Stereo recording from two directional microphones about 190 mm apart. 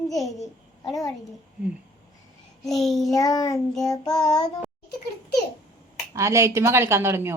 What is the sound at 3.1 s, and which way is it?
Child singing, 20° left (ahead or behind).